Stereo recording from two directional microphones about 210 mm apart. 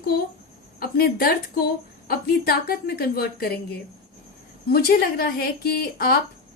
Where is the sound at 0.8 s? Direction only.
45° left (ahead or behind).